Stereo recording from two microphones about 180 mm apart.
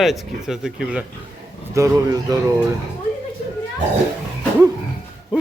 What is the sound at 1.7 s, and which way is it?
Speech, 15° right (ahead or behind).